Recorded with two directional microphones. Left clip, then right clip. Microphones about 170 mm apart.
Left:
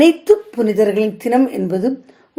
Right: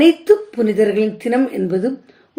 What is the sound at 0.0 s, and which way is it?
A woman's voice, 30° left (ahead or behind).